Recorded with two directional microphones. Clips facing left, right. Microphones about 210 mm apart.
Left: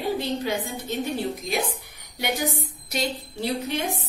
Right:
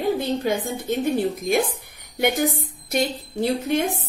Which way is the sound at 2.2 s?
50° right (ahead or behind).